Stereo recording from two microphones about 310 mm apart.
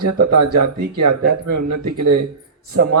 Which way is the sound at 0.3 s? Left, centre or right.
Right.